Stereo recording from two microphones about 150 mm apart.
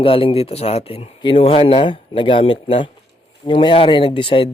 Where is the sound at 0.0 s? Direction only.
35° left (ahead or behind).